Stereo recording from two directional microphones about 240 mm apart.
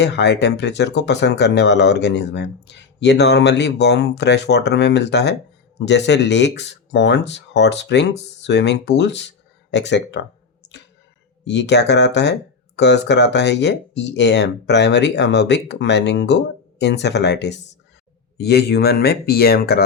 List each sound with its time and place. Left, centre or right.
0.0 s speech: left
11.4 s speech: left